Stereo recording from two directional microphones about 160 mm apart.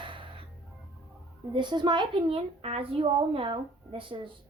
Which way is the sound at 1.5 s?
30° right (ahead or behind).